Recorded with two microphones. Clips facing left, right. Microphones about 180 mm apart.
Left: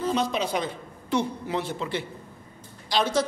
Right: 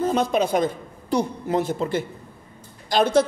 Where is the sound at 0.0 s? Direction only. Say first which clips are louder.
Right 5 dB; 50° right (ahead or behind).